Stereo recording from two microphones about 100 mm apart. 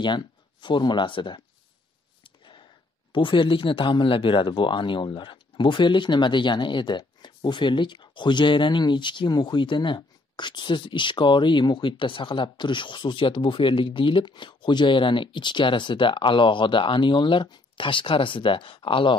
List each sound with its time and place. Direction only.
0.0 s speech: 50° left (ahead or behind)
2.2 s a sound: 55° left (ahead or behind)
3.1 s speech: 55° left (ahead or behind)